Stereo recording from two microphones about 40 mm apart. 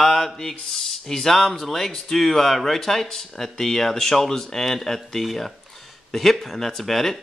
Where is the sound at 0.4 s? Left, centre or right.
Centre.